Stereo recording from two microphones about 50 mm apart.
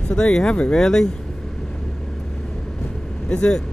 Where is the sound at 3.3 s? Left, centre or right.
Centre.